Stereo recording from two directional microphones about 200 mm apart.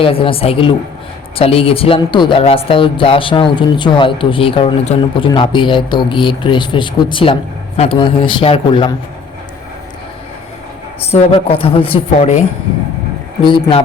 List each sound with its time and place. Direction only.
0.0 s a woman's voice: 25° left (ahead or behind)
11.1 s a woman's voice: 30° left (ahead or behind)
13.4 s a woman's voice: 25° left (ahead or behind)